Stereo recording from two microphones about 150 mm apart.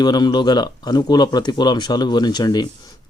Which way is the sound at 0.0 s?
25° left (ahead or behind).